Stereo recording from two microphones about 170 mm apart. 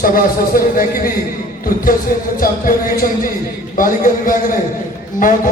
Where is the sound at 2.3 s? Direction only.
55° left (ahead or behind).